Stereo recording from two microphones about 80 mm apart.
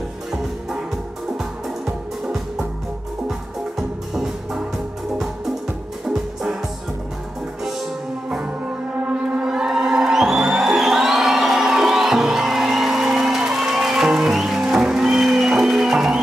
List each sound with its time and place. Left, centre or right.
1.4 s music: centre
6.0 s music: centre
8.3 s music: centre